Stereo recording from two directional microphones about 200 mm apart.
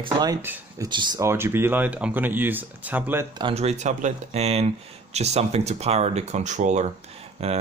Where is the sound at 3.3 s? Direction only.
30° right (ahead or behind).